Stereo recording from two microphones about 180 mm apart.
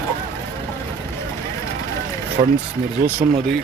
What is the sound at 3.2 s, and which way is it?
Speech, 45° right (ahead or behind).